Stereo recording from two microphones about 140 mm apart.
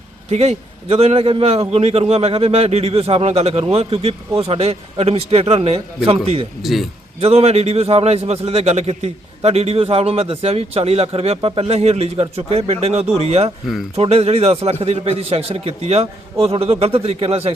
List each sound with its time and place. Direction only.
0.3 s a man's voice: 50° right (ahead or behind)
6.6 s a man's voice: centre (ahead or behind)
7.2 s a man's voice: 50° right (ahead or behind)